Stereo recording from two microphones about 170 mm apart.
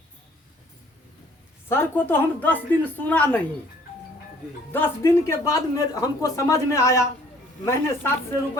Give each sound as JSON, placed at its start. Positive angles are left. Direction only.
{"t": 1.7, "sound": "speech", "side_deg": 10}
{"t": 4.7, "sound": "speech", "side_deg": 15}